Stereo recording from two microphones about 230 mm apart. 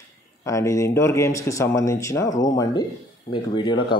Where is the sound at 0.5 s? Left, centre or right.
Centre.